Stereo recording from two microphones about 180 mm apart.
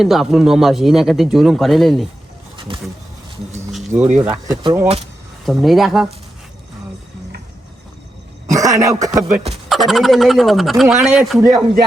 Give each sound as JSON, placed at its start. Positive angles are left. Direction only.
{"t": 0.0, "sound": "speech", "side_deg": 0}
{"t": 2.6, "sound": "speech", "side_deg": -30}
{"t": 3.7, "sound": "a sound", "side_deg": -5}
{"t": 4.2, "sound": "speech", "side_deg": -10}
{"t": 5.5, "sound": "speech", "side_deg": 0}
{"t": 8.5, "sound": "speech", "side_deg": -20}
{"t": 9.3, "sound": "speech", "side_deg": -35}
{"t": 9.6, "sound": "speech", "side_deg": 0}